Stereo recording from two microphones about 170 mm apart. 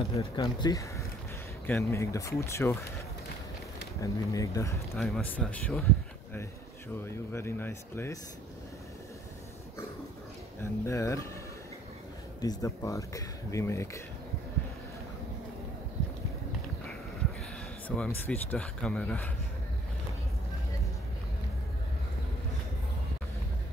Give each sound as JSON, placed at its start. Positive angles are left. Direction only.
{"t": 0.4, "sound": "speech", "side_deg": 20}
{"t": 4.0, "sound": "speech", "side_deg": 20}
{"t": 4.9, "sound": "speech", "side_deg": 0}
{"t": 7.0, "sound": "speech", "side_deg": 15}
{"t": 10.6, "sound": "speech", "side_deg": 15}
{"t": 12.4, "sound": "speech", "side_deg": 20}
{"t": 17.8, "sound": "speech", "side_deg": 10}